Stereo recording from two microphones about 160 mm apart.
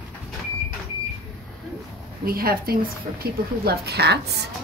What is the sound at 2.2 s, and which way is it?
Speech, 70° right (ahead or behind).